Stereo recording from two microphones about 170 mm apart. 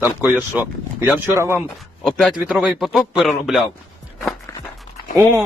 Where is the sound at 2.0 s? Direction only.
Centre (ahead or behind).